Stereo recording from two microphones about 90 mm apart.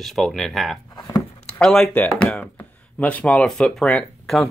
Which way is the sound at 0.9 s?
50° left (ahead or behind).